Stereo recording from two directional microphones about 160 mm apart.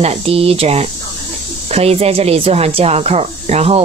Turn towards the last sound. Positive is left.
turn(degrees=-40)  # may be behind; listen again after turning